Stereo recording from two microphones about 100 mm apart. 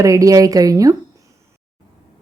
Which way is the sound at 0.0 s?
35° right (ahead or behind).